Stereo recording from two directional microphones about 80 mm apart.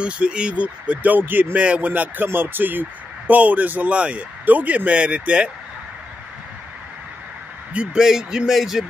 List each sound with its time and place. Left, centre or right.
0.0 s speech: centre
7.7 s speech: centre